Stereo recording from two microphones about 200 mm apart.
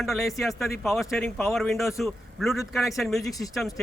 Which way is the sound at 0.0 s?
Centre (ahead or behind).